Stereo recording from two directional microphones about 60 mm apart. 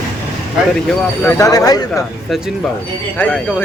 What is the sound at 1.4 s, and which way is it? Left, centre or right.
Speech, left.